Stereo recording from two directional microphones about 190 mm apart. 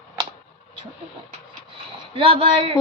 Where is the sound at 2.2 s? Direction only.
30° right (ahead or behind).